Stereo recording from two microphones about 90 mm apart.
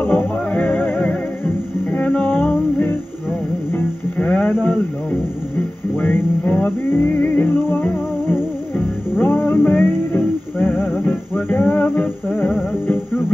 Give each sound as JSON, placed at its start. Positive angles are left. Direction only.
{"t": 0.0, "sound": "music", "side_deg": 20}
{"t": 5.9, "sound": "music", "side_deg": 20}